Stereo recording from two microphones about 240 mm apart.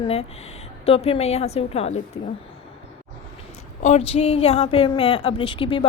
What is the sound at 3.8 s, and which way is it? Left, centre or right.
A woman's voice, left.